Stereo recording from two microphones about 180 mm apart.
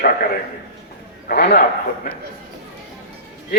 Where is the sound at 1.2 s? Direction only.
60° left (ahead or behind).